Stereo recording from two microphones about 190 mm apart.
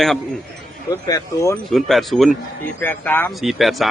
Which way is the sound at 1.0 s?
20° left (ahead or behind).